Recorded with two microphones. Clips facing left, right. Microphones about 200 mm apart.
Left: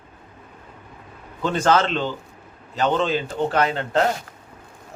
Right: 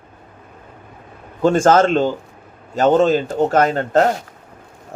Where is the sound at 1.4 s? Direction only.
45° right (ahead or behind).